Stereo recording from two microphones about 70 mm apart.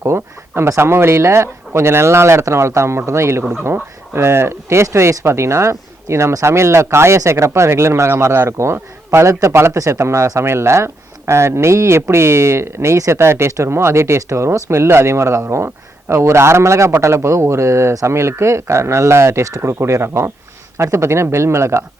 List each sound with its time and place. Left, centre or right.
0.0 s speech: right